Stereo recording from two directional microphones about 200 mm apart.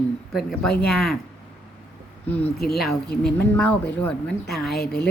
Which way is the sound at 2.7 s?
Centre (ahead or behind).